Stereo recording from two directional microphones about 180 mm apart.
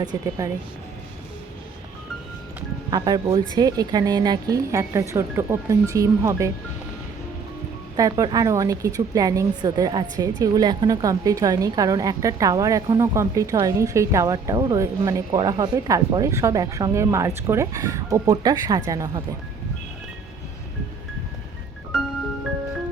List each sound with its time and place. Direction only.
0.0 s a woman's voice: 20° right (ahead or behind)
2.9 s a woman's voice: 20° right (ahead or behind)
7.9 s a woman's voice: 20° right (ahead or behind)